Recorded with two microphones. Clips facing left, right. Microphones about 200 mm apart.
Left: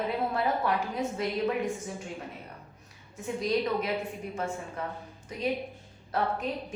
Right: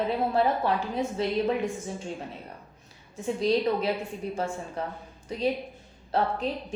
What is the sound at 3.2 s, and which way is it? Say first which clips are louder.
A woman's voice: right 4 dB; 30° right (ahead or behind).